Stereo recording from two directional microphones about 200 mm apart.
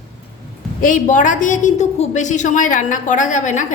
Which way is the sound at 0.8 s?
40° left (ahead or behind).